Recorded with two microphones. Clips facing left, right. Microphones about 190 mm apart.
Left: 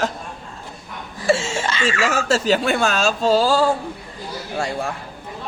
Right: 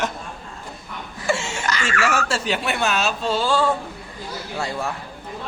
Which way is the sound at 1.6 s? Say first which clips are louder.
Left 3 dB; 25° left (ahead or behind).